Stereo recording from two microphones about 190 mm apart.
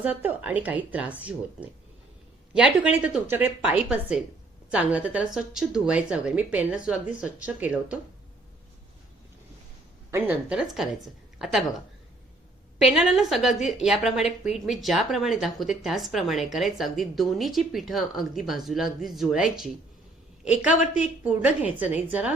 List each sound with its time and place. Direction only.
0.0 s speech: 10° right (ahead or behind)
2.5 s a woman's voice: 5° right (ahead or behind)
10.1 s a woman's voice: 10° right (ahead or behind)
12.8 s a woman's voice: centre (ahead or behind)